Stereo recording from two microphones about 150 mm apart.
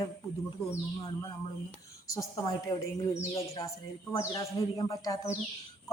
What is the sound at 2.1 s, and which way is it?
Speech, 25° left (ahead or behind).